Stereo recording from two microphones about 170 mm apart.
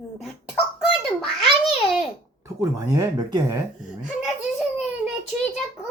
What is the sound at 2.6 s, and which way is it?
Speech, 15° right (ahead or behind).